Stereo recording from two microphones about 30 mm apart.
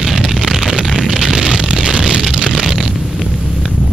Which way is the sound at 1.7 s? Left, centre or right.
Right.